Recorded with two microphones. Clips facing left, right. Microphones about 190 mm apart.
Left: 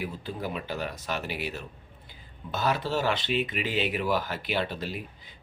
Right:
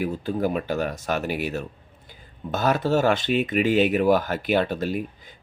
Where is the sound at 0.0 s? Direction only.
50° right (ahead or behind).